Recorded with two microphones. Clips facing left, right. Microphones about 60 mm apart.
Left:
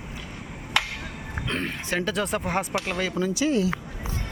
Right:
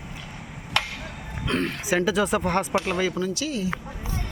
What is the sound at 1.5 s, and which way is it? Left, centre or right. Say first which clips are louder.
Speech: right 4 dB; centre.